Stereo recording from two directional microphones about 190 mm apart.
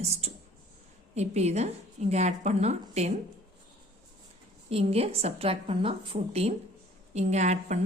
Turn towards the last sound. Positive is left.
turn(degrees=-35)  # may be behind; listen again after turning